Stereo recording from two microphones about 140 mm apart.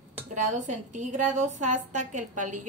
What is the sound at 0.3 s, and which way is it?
A woman's voice, 60° right (ahead or behind).